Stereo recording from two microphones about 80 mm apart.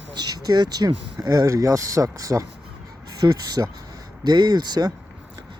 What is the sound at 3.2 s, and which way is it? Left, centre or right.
Speech, right.